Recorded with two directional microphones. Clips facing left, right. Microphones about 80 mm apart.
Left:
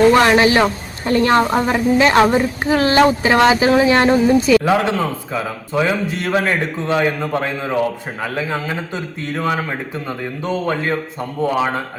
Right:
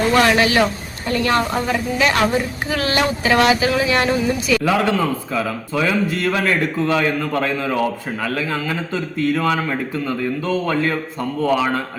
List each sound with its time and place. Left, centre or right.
0.1 s a woman's voice: left